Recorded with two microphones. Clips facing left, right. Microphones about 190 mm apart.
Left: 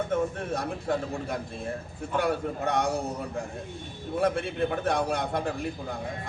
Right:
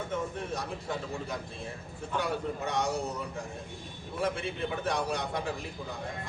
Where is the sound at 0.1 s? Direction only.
55° left (ahead or behind).